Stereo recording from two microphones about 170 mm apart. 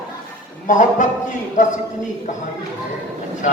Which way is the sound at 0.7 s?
50° left (ahead or behind).